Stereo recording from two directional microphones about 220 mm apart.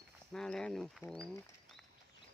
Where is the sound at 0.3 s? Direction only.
5° left (ahead or behind).